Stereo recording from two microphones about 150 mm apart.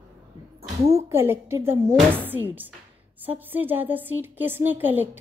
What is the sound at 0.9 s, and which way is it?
A woman's voice, 15° right (ahead or behind).